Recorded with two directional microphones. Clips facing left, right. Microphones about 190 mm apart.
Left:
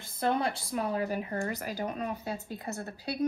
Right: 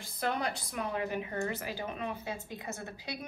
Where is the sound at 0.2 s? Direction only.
30° left (ahead or behind).